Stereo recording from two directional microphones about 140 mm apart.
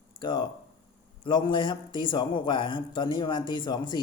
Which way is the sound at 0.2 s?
35° left (ahead or behind).